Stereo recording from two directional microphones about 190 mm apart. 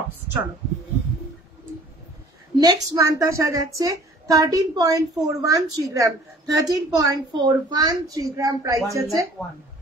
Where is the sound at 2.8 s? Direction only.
15° right (ahead or behind).